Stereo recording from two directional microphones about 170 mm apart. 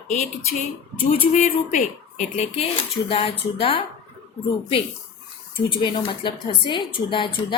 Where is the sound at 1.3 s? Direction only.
45° left (ahead or behind).